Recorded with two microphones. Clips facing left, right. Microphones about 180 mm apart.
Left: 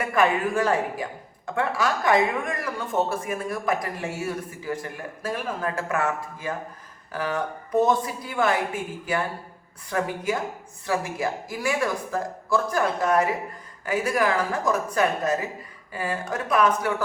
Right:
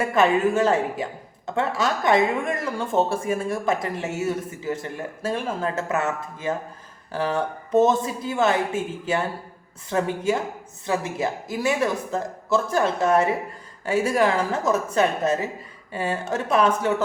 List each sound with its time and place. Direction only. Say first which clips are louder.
0.0 s speech: right 3 dB; 25° right (ahead or behind)